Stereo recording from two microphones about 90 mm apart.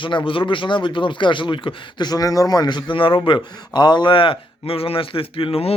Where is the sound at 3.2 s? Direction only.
55° left (ahead or behind); by 5.7 s 85° left.